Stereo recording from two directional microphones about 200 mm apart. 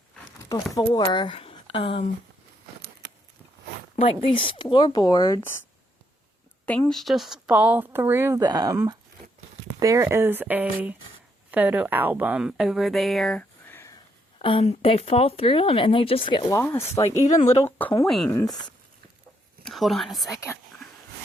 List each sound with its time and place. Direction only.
0.7 s speech: 20° left (ahead or behind)
4.0 s speech: 25° left (ahead or behind)
6.7 s speech: 5° left (ahead or behind)
14.3 s a woman's voice: 25° left (ahead or behind)
17.2 s speech: 35° left (ahead or behind)
17.7 s a woman's voice: 10° left (ahead or behind)
19.6 s speech: centre (ahead or behind)